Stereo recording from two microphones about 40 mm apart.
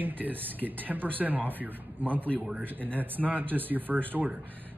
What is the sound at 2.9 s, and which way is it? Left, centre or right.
Speech, right.